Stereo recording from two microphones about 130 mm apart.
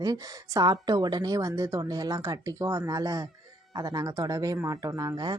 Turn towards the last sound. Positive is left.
turn(degrees=-35)  # may be behind; listen again after turning